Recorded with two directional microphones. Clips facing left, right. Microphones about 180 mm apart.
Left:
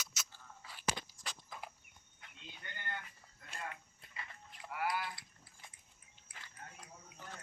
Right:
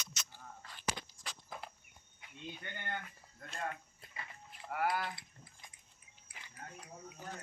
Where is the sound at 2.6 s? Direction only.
55° right (ahead or behind).